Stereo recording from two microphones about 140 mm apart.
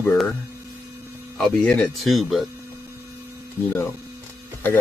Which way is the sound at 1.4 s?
5° left (ahead or behind).